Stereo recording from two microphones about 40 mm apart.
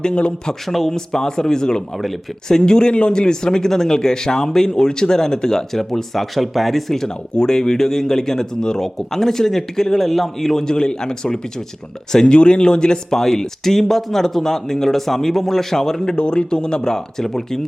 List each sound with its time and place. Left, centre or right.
0.0 s speech: left
0.7 s a man's voice: centre
16.1 s a man's voice: left